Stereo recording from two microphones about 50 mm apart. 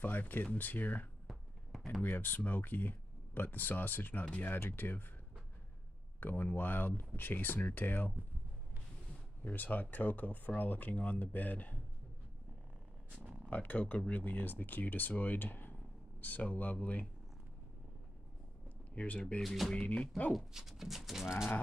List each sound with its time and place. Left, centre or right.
0.0 s speech: left
1.2 s a sound: centre
2.0 s speech: left
6.1 s speech: left
9.4 s speech: left
13.5 s speech: left
18.9 s speech: left
19.4 s speech: centre